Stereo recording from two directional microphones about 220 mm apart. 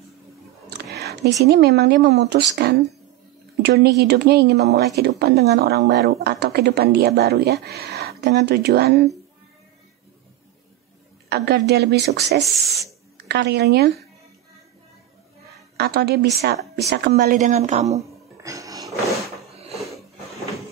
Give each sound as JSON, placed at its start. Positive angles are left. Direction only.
{"t": 0.9, "sound": "speech", "side_deg": -50}
{"t": 11.2, "sound": "speech", "side_deg": -50}
{"t": 15.8, "sound": "speech", "side_deg": -50}
{"t": 18.4, "sound": "roar", "side_deg": -15}
{"t": 19.5, "sound": "a sound", "side_deg": -30}